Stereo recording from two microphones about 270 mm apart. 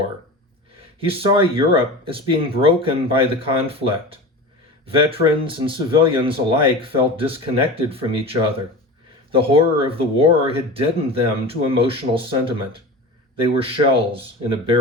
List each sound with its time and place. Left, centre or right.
0.9 s speech: centre